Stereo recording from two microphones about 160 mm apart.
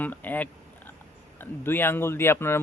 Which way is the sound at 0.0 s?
10° left (ahead or behind).